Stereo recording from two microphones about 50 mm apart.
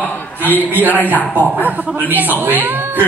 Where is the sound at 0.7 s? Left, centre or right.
Right.